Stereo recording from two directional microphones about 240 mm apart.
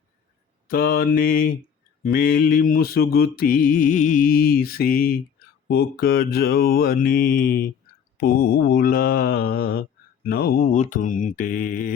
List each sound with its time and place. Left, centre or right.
0.7 s mantra: left